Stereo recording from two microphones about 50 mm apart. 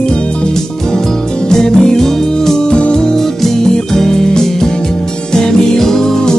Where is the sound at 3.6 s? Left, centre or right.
Centre.